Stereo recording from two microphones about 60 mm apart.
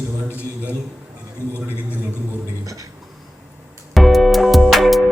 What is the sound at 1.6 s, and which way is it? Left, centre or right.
Speech, right.